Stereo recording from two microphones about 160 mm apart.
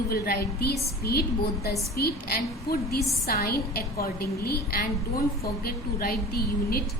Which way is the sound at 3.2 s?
70° left (ahead or behind).